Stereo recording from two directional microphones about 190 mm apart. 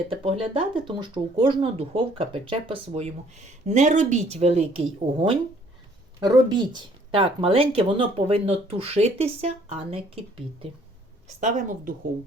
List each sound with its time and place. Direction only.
0.1 s speech: 25° right (ahead or behind); by 11.9 s 45° right (ahead or behind)